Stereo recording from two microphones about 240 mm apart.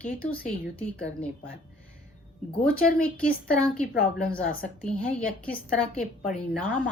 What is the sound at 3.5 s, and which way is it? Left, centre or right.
Speech, centre.